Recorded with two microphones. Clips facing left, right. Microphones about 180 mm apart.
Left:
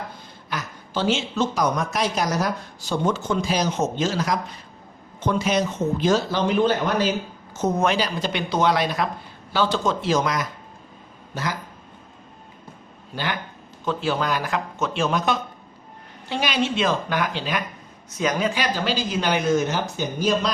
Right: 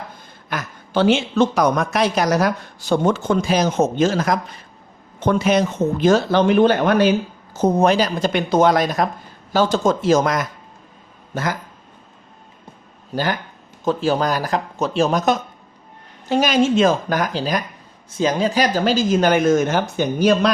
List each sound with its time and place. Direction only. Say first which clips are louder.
0.5 s a woman's voice: right 7 dB; 60° right (ahead or behind)
7.5 s speech: right 6 dB; 35° right (ahead or behind)
13.1 s speech: right 6 dB; 40° right (ahead or behind)
18.1 s speech: right 4 dB; 30° right (ahead or behind); by 20.5 s 60° right (ahead or behind)